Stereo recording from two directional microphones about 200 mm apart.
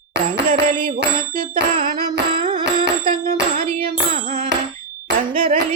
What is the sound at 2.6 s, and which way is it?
Bicycle bell, 50° right (ahead or behind).